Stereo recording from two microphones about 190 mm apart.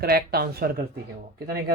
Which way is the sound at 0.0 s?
55° right (ahead or behind).